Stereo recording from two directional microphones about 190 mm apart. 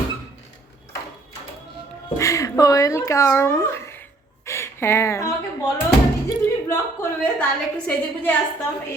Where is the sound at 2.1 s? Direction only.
15° left (ahead or behind).